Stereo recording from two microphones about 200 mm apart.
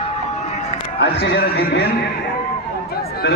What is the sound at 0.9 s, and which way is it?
Speech, 55° left (ahead or behind).